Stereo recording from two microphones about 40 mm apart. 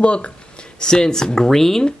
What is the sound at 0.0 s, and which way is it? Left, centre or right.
Speech, left.